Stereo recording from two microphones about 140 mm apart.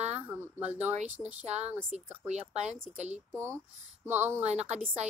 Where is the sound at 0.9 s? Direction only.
50° right (ahead or behind).